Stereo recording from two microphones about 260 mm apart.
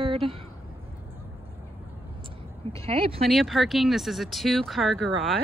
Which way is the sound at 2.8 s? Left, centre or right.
Right.